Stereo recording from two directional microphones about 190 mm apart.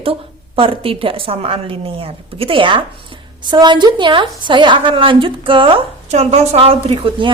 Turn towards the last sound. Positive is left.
turn(degrees=-30)  # may be behind; listen again after turning